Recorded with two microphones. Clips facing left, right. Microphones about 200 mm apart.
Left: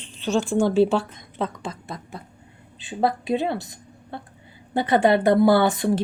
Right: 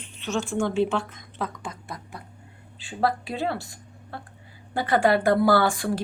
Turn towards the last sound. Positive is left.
turn(degrees=20)  # may be behind; listen again after turning